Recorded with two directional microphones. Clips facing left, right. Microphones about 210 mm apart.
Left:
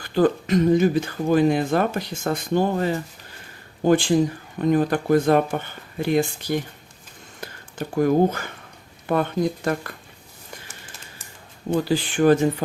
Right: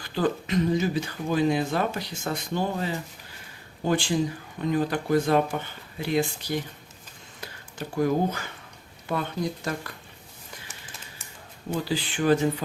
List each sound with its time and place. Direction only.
0.0 s speech: 45° left (ahead or behind)
11.7 s speech: 50° left (ahead or behind)